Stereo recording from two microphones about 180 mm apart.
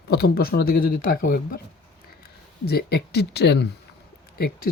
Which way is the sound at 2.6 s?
60° left (ahead or behind).